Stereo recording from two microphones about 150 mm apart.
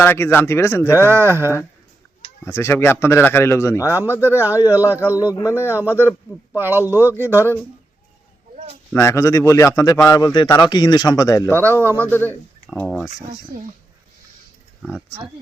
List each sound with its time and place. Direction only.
0.0 s speech: 15° left (ahead or behind)
0.9 s speech: 15° right (ahead or behind)
2.4 s speech: 15° left (ahead or behind)
3.8 s speech: 15° right (ahead or behind)
5.3 s a man's voice: 20° left (ahead or behind)
5.5 s speech: 10° right (ahead or behind)
9.0 s a man's voice: 20° left (ahead or behind)
11.8 s speech: 15° right (ahead or behind)
12.0 s speech: 15° left (ahead or behind)
14.8 s speech: centre (ahead or behind)